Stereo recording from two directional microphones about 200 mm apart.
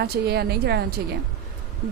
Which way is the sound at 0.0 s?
55° right (ahead or behind).